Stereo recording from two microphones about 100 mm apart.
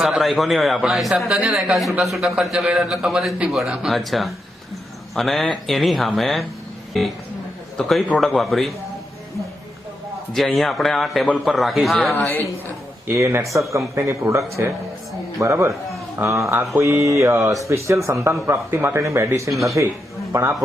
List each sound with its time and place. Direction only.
0.0 s a man's voice: centre (ahead or behind)
10.3 s a man's voice: centre (ahead or behind)
12.1 s a woman's voice: 20° left (ahead or behind)
13.1 s a man's voice: 30° right (ahead or behind)
19.5 s a man's voice: centre (ahead or behind)
20.3 s speech: 30° right (ahead or behind)